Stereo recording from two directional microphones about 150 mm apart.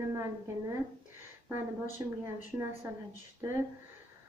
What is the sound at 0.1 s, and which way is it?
A woman's voice, 15° right (ahead or behind).